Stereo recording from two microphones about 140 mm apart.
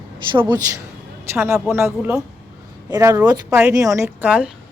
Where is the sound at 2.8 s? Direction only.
25° right (ahead or behind).